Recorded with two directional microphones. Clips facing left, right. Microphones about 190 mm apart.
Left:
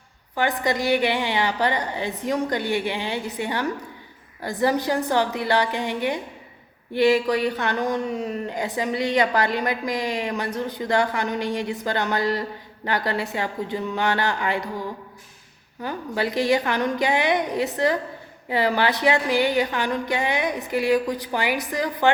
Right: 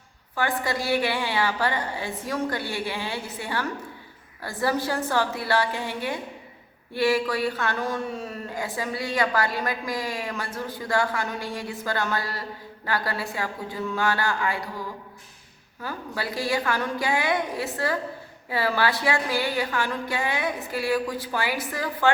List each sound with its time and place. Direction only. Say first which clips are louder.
0.3 s a woman's voice: left 4 dB; 20° left (ahead or behind)
15.8 s a woman's voice: left 6 dB; 20° left (ahead or behind)